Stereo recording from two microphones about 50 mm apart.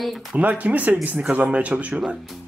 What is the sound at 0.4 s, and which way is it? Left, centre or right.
Speech, right.